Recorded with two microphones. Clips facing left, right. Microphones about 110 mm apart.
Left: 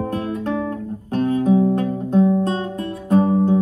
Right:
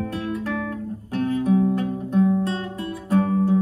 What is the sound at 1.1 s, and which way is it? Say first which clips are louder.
Music: left 4 dB; 30° left (ahead or behind).